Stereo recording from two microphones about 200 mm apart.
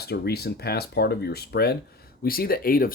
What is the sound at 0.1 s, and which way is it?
Speech, 50° left (ahead or behind).